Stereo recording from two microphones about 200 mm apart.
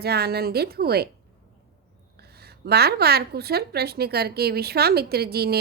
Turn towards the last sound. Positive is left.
turn(degrees=-50)  # may be behind; listen again after turning